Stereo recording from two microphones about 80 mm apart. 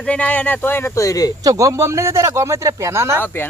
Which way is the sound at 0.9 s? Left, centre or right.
Left.